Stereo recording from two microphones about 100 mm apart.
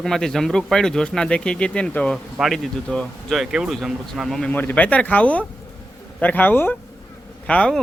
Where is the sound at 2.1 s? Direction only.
Centre (ahead or behind).